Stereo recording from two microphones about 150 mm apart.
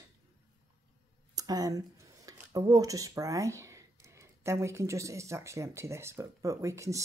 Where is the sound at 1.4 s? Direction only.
25° right (ahead or behind).